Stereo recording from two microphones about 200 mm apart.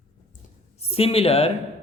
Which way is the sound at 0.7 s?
30° left (ahead or behind).